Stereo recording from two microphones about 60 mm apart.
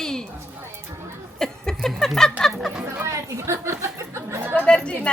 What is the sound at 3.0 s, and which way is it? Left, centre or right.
Chatter, right.